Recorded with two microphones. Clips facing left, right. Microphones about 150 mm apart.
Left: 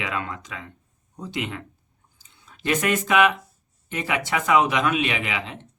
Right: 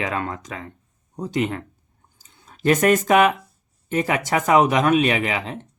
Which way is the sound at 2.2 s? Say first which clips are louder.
Right 9 dB; 45° right (ahead or behind).